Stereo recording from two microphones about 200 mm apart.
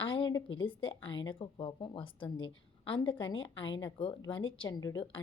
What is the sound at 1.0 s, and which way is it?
Speech, 70° left (ahead or behind).